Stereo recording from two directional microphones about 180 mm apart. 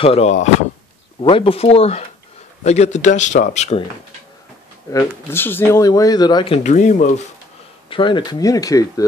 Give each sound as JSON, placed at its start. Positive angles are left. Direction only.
{"t": 0.0, "sound": "speech", "side_deg": 35}
{"t": 1.2, "sound": "speech", "side_deg": 30}
{"t": 4.9, "sound": "speech", "side_deg": 10}
{"t": 7.9, "sound": "speech", "side_deg": 25}